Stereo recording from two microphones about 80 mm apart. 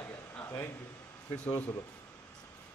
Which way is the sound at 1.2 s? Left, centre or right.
Centre.